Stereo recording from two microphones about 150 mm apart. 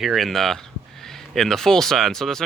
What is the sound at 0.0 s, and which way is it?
Speech, centre (ahead or behind).